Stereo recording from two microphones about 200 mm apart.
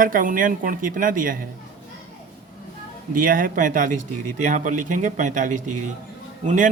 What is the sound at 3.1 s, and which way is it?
A man's voice, 45° right (ahead or behind).